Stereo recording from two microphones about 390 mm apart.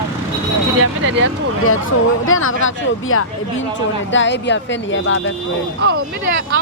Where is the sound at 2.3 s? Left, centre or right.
Left.